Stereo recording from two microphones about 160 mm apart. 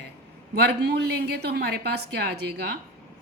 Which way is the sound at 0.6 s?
90° right.